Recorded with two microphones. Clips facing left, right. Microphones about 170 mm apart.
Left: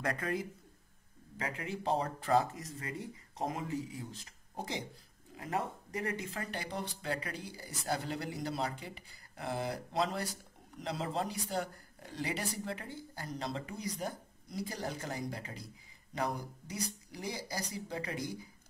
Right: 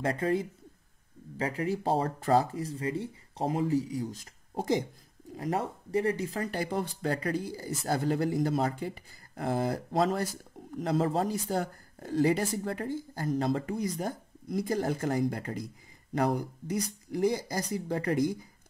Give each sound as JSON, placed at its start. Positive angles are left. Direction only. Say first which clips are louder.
{"t": 0.0, "sound": "a man's voice", "louder": "right 7 dB", "side_deg": -30}